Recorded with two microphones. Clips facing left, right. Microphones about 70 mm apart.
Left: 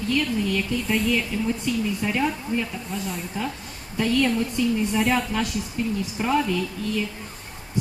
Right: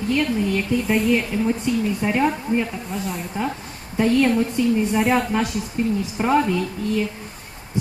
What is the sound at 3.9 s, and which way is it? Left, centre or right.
Speech, right.